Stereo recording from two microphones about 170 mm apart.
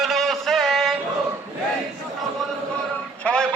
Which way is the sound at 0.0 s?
Centre (ahead or behind).